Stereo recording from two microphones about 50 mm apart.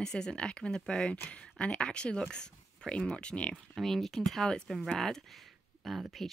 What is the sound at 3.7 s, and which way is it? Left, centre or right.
Speech, centre.